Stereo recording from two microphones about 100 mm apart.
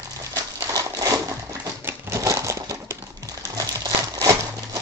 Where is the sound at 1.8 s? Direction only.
25° right (ahead or behind).